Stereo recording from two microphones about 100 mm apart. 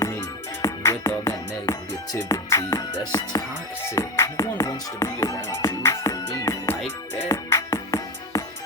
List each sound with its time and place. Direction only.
0.6 s music: 35° left (ahead or behind)